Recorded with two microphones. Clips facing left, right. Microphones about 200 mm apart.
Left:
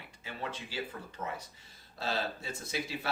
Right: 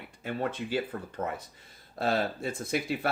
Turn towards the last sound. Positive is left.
turn(degrees=-55)  # may be behind; listen again after turning